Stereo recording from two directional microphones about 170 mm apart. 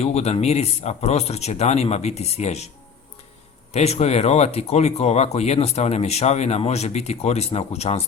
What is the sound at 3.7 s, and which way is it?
Speech, 40° left (ahead or behind).